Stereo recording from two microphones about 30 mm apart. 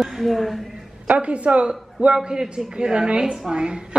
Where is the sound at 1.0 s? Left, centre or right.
Right.